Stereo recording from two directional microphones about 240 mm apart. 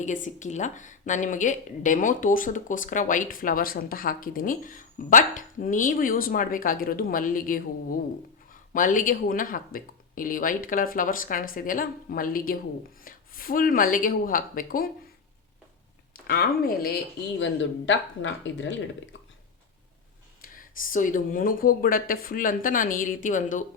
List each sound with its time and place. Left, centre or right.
0.0 s speech: left
16.1 s speech: left
20.4 s speech: left